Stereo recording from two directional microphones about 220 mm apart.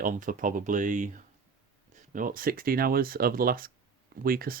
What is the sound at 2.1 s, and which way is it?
Speech, 40° right (ahead or behind).